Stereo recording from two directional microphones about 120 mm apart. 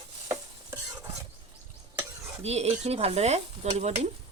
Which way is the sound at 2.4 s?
60° right (ahead or behind).